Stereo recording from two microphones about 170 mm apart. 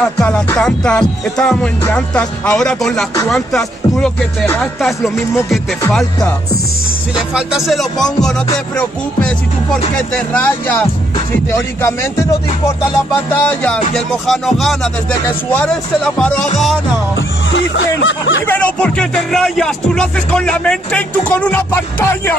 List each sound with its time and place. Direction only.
0.0 s music: 5° left (ahead or behind)
7.3 s music: centre (ahead or behind)
10.3 s music: 10° left (ahead or behind)
17.5 s speech: 90° left
18.5 s music: 10° left (ahead or behind)